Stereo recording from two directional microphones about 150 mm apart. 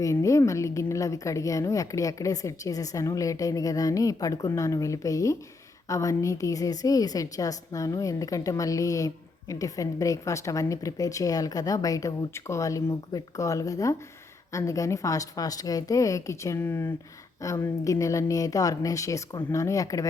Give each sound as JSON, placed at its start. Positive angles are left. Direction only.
{"t": 0.0, "sound": "a woman's voice", "side_deg": 20}